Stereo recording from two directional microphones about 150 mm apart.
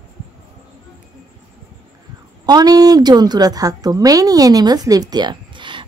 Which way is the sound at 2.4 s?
25° right (ahead or behind).